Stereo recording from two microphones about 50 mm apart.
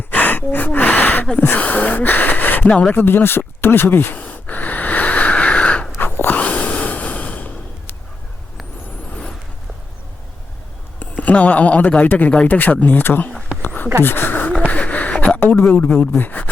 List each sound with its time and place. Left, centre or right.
0.1 s gasp: left
1.4 s speech: left
4.2 s wheeze: left
6.3 s a sound: left
11.0 s speech: left
12.5 s speech: left
13.6 s a sound: left
14.0 s speech: left
14.7 s a sound: left
15.4 s speech: left